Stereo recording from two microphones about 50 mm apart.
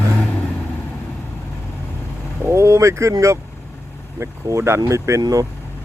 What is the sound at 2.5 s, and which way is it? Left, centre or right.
Speech, right.